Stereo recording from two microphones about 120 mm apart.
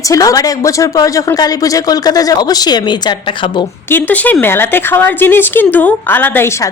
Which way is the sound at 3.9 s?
15° left (ahead or behind).